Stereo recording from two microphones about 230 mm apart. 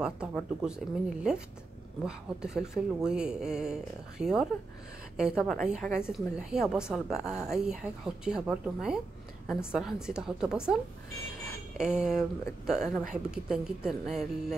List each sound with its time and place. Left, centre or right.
0.0 s speech: centre